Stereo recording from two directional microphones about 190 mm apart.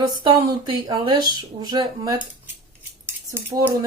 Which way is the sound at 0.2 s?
25° right (ahead or behind).